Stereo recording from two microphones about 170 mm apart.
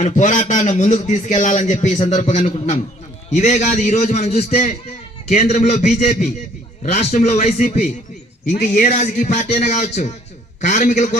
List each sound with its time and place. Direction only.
0.0 s a man's voice: 45° left (ahead or behind)